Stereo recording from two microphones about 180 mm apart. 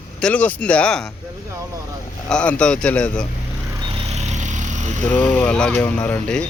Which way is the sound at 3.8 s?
35° right (ahead or behind).